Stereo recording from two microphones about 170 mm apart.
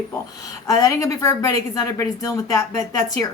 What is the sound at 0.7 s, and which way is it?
A woman's voice, 20° left (ahead or behind).